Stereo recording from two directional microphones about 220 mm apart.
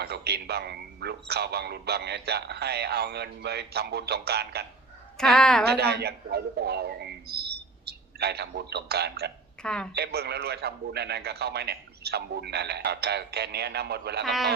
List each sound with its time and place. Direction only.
0.0 s a man's voice: 45° right (ahead or behind)
5.1 s speech: 5° left (ahead or behind)
5.6 s a man's voice: 45° right (ahead or behind)
9.6 s speech: 5° left (ahead or behind)
9.9 s a man's voice: 45° right (ahead or behind)
14.3 s speech: centre (ahead or behind)